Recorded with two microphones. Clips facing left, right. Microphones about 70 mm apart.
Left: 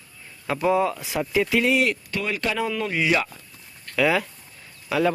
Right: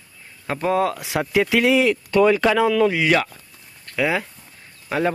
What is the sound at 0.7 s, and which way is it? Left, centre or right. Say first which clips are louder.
Speech: right 3 dB; right.